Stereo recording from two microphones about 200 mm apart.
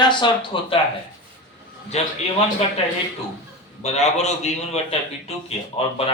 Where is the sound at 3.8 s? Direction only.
35° left (ahead or behind).